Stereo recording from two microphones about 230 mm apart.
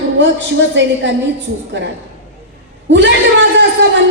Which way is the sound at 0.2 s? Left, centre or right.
Right.